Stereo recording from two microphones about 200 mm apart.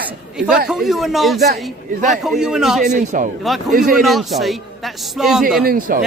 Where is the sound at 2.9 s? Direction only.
40° right (ahead or behind).